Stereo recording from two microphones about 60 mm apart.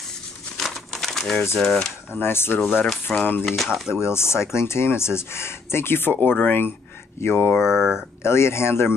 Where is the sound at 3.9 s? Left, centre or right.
Left.